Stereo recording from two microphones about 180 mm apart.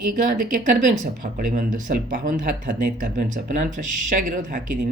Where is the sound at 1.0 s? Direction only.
45° right (ahead or behind).